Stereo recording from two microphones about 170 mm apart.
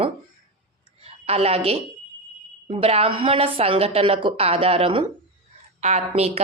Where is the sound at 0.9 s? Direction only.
35° right (ahead or behind).